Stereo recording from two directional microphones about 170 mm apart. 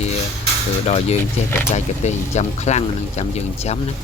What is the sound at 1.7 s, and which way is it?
Speech, 40° left (ahead or behind).